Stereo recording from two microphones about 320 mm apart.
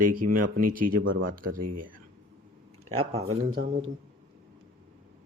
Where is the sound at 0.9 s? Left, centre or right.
Right.